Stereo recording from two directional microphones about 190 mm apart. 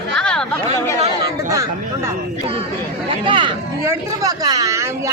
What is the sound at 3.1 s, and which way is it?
A woman's voice, 25° right (ahead or behind).